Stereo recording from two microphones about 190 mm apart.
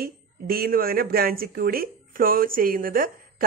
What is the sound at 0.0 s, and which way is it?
Speech, 50° right (ahead or behind).